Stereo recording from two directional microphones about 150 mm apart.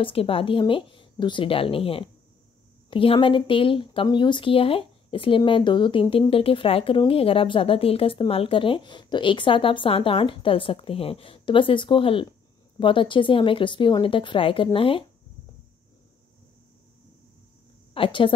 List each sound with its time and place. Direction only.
0.0 s speech: 40° left (ahead or behind)
17.9 s speech: 35° left (ahead or behind)